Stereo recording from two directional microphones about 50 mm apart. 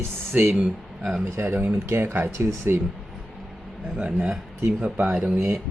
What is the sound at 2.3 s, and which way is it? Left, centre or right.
Speech, right.